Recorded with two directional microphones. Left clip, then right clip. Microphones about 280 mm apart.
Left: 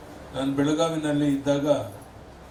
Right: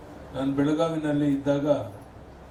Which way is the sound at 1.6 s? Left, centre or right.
Right.